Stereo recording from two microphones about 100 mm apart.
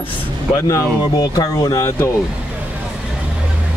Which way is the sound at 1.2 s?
40° left (ahead or behind).